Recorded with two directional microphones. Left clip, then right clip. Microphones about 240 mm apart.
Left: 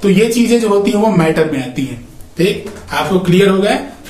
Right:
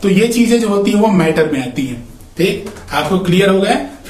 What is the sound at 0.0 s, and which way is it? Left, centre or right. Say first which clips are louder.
Speech: left 1 dB; centre.